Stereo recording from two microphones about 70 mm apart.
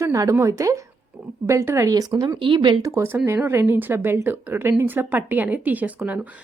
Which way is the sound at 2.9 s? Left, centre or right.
Right.